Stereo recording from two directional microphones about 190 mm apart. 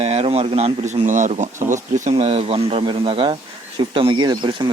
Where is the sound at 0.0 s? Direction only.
30° right (ahead or behind).